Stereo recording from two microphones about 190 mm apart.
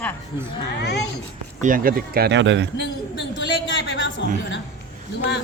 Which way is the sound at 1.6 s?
45° right (ahead or behind).